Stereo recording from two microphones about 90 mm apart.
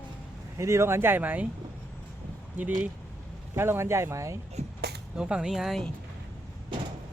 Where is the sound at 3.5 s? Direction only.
25° right (ahead or behind).